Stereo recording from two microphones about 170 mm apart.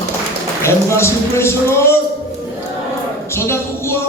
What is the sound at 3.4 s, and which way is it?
Speech, 15° left (ahead or behind).